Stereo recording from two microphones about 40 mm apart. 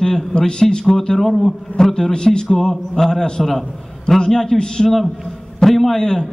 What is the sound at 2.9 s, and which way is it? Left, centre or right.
A man's voice, centre.